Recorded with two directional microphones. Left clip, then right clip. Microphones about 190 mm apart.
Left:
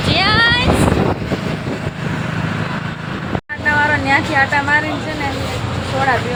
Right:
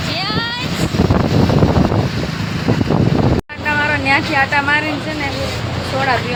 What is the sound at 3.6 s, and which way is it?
Vehicle, 10° right (ahead or behind).